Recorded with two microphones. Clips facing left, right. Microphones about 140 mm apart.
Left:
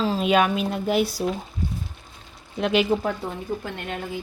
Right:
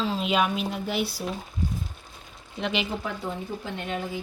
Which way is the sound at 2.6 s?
45° left (ahead or behind).